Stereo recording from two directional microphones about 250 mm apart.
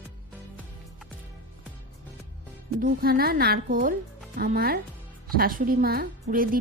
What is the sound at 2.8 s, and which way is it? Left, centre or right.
A woman's voice, right.